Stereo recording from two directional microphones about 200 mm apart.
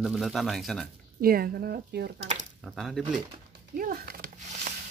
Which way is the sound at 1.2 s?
50° right (ahead or behind).